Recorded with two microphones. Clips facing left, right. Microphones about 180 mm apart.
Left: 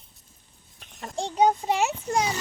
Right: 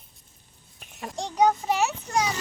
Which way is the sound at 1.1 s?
25° left (ahead or behind).